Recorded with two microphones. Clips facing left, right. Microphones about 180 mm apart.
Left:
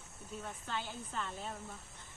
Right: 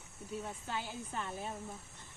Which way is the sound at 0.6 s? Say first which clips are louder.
Right 1 dB; 15° right (ahead or behind).